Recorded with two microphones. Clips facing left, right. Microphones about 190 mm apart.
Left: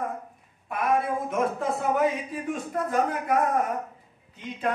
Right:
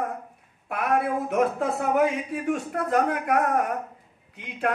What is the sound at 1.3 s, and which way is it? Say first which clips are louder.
Speech: right 4 dB; 65° right (ahead or behind).